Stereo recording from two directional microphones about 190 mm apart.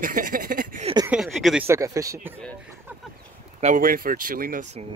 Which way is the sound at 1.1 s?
5° right (ahead or behind).